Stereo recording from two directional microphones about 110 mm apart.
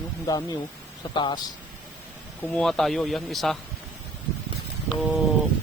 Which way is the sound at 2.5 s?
5° left (ahead or behind).